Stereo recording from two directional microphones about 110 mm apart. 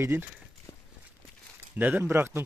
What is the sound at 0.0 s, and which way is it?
Speech, 20° right (ahead or behind).